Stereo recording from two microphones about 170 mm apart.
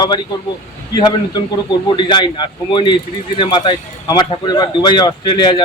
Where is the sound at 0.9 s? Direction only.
25° left (ahead or behind).